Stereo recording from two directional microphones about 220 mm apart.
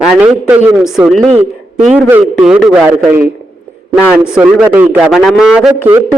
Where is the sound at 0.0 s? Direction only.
5° right (ahead or behind).